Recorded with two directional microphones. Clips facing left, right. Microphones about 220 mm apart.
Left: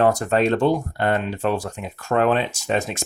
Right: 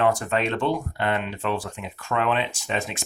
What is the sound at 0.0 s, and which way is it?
Speech, 40° left (ahead or behind).